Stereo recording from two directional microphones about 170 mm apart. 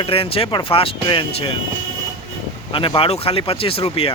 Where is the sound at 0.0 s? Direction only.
35° left (ahead or behind).